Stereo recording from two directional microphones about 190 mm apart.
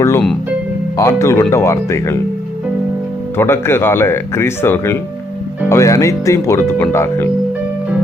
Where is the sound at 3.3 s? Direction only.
10° left (ahead or behind).